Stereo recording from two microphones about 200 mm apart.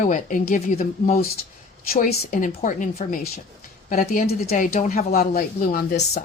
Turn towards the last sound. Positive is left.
turn(degrees=45)  # may be behind; listen again after turning